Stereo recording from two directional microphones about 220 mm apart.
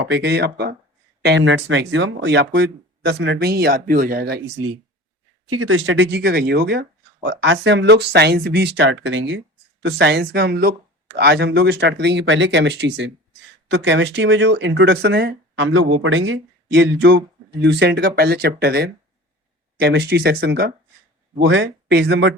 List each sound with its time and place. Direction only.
0.0 s speech: 50° right (ahead or behind)
5.5 s speech: 70° right (ahead or behind); by 22.4 s 55° right (ahead or behind)